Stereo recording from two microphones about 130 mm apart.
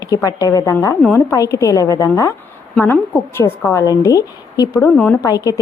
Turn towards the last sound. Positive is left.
turn(degrees=25)  # may be behind; listen again after turning